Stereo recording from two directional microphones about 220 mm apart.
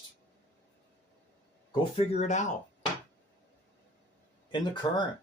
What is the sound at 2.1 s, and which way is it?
Speech, 30° left (ahead or behind).